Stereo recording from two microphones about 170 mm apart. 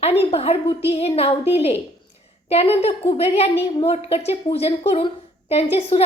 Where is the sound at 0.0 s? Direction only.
35° left (ahead or behind).